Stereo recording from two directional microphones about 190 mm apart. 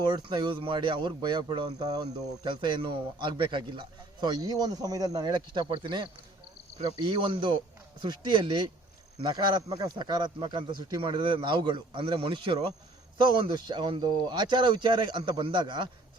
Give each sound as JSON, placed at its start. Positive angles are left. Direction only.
{"t": 0.0, "sound": "speech", "side_deg": -25}